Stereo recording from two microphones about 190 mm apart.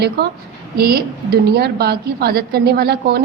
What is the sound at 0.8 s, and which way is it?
A woman's voice, 55° right (ahead or behind).